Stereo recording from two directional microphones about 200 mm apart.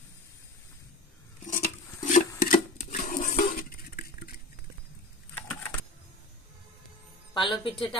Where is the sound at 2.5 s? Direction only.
45° left (ahead or behind).